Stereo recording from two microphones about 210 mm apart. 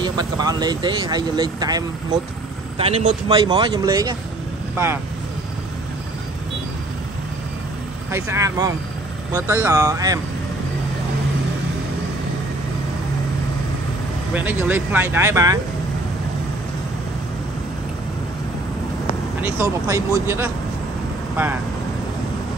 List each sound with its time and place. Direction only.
0.0 s speech: 20° right (ahead or behind)
2.8 s speech: 30° right (ahead or behind)
3.3 s speech: 20° right (ahead or behind)
8.1 s speech: 15° right (ahead or behind)
14.3 s speech: 10° right (ahead or behind)
19.4 s speech: 15° right (ahead or behind)